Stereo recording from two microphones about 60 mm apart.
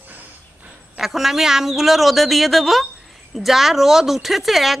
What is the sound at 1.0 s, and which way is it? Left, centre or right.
A woman's voice, centre.